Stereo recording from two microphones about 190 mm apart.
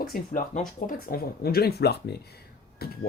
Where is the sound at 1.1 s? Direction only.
55° left (ahead or behind).